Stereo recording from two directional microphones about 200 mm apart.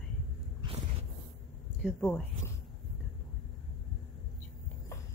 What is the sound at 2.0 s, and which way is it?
Speech, 10° left (ahead or behind).